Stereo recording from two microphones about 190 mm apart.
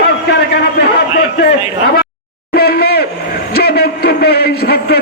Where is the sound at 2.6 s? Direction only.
55° left (ahead or behind).